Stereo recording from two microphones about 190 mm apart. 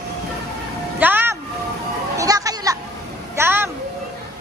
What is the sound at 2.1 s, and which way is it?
Children playing, 20° right (ahead or behind).